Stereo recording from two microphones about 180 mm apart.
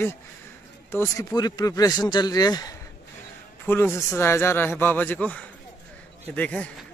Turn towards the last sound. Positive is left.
turn(degrees=10)  # may be behind; listen again after turning